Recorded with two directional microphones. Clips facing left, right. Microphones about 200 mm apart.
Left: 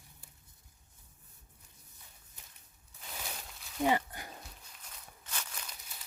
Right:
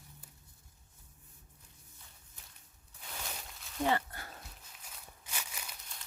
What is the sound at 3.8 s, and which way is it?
Pig, 15° left (ahead or behind).